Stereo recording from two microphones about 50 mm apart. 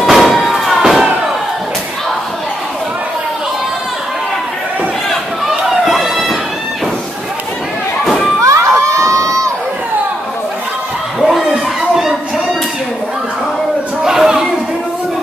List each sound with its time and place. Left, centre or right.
0.0 s music: centre
5.5 s run: centre
8.0 s thump: centre
8.4 s children shouting: right
11.1 s a sound: centre
14.0 s chatter: centre